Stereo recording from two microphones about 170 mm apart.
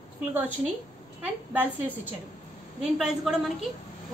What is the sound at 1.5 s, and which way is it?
A woman's voice, 10° right (ahead or behind).